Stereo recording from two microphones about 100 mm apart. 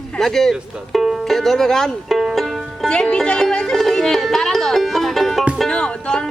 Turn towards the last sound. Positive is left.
turn(degrees=10)  # may be behind; listen again after turning